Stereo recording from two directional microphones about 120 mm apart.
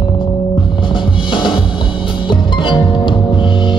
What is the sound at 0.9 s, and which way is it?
Drum, 40° left (ahead or behind).